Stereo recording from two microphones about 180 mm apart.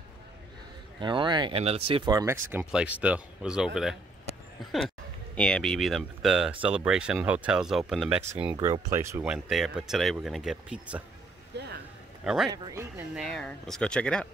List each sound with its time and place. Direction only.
1.0 s speech: 25° right (ahead or behind)
2.5 s speech: 5° right (ahead or behind)
8.2 s speech: 15° right (ahead or behind)
9.3 s speech: centre (ahead or behind)
11.5 s a sound: 70° right (ahead or behind)
12.4 s speech: 20° right (ahead or behind)
13.1 s speech: centre (ahead or behind)